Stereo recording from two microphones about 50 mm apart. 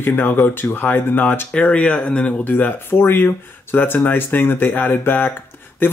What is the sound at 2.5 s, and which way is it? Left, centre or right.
Speech, left.